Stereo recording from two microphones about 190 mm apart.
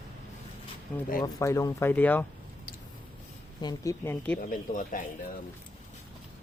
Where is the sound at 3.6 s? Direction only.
20° left (ahead or behind).